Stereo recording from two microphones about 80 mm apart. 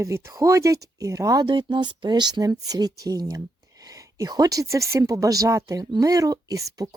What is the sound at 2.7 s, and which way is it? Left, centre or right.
Speech, right.